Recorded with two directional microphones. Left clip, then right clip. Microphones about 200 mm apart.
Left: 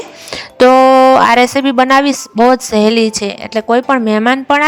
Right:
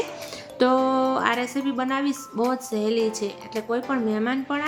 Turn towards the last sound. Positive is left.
turn(degrees=50)  # may be behind; listen again after turning